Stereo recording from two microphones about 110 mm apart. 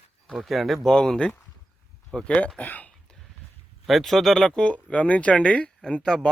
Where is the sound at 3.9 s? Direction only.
Centre (ahead or behind).